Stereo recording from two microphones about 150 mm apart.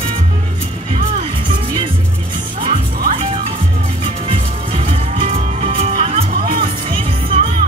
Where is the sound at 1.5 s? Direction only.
35° right (ahead or behind).